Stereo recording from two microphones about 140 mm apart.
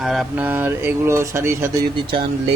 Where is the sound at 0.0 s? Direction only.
Centre (ahead or behind).